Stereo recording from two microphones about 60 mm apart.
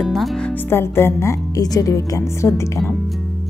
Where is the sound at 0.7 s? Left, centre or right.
Left.